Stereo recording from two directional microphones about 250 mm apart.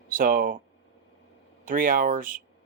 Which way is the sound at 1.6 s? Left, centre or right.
Right.